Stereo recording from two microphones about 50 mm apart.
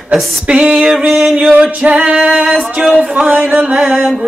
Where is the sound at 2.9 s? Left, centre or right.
Centre.